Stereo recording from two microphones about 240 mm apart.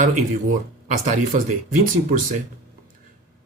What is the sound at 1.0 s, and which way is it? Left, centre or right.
Speech, right.